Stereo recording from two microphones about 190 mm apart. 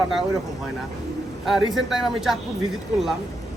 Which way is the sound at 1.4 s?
Centre (ahead or behind).